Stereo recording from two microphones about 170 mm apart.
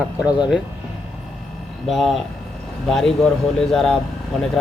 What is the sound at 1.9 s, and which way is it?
Speech, centre (ahead or behind).